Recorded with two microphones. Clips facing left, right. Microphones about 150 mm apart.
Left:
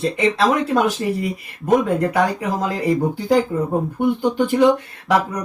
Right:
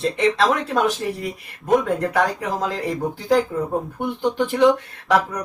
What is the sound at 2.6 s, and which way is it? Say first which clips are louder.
Speech: left 7 dB; 5° left (ahead or behind).